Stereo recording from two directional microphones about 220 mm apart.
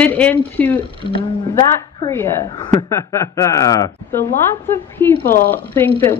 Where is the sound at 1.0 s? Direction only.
20° left (ahead or behind).